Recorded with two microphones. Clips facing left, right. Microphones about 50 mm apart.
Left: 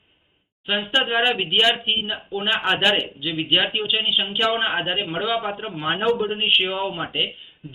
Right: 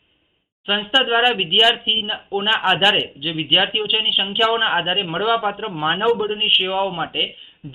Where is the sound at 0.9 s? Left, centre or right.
Centre.